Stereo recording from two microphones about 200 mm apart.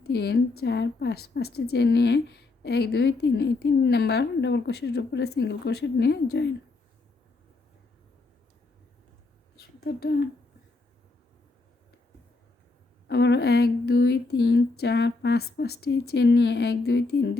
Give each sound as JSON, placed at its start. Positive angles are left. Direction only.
{"t": 0.0, "sound": "a woman's voice", "side_deg": 55}
{"t": 9.6, "sound": "a sound", "side_deg": 50}
{"t": 13.1, "sound": "a woman's voice", "side_deg": 60}